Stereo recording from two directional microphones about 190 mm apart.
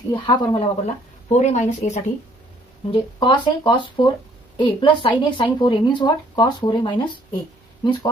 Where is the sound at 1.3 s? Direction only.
40° left (ahead or behind).